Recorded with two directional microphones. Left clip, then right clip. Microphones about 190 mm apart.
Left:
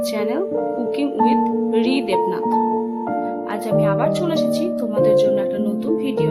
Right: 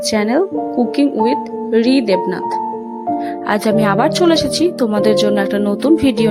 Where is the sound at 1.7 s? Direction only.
30° right (ahead or behind).